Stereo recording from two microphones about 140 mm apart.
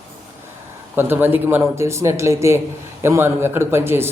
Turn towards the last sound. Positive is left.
turn(degrees=-15)  # may be behind; listen again after turning